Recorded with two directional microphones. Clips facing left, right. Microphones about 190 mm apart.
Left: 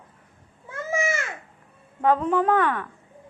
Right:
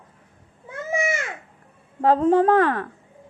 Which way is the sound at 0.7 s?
20° right (ahead or behind).